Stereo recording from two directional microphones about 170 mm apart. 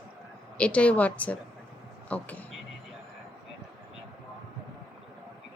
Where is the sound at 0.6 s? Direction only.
5° left (ahead or behind).